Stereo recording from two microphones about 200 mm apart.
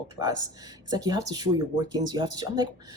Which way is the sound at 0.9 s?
20° right (ahead or behind).